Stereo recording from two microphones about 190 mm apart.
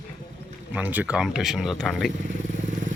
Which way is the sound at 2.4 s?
40° right (ahead or behind).